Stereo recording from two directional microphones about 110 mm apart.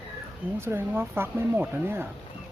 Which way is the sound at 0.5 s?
20° right (ahead or behind).